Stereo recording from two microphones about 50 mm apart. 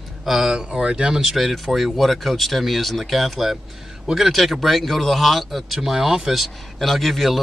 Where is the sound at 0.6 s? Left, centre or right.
Centre.